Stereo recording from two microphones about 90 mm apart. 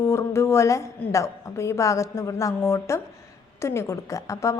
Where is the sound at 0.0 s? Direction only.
30° left (ahead or behind).